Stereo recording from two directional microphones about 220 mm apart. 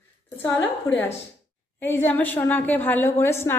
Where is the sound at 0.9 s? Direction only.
15° left (ahead or behind).